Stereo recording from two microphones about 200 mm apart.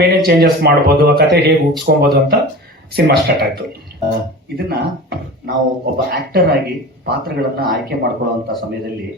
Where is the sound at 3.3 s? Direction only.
50° right (ahead or behind).